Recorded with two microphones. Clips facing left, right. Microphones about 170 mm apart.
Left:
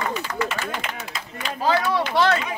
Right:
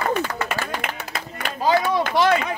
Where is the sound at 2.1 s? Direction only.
15° right (ahead or behind).